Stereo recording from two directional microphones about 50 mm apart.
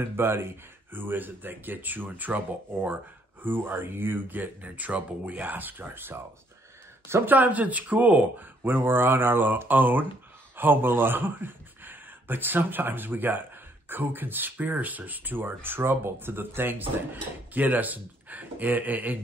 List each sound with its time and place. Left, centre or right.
0.0 s speech: right
0.9 s speech: right
3.4 s speech: right
7.2 s speech: right